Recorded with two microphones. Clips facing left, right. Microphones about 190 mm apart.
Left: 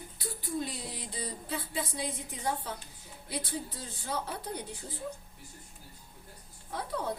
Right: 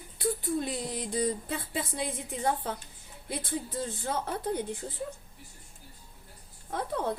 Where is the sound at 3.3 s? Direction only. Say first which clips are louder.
Right 3 dB; 50° right (ahead or behind).